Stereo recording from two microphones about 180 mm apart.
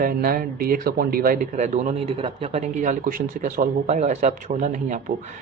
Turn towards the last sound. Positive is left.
turn(degrees=-45)  # may be behind; listen again after turning